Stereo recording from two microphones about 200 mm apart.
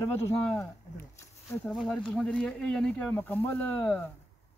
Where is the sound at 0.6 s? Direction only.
15° left (ahead or behind).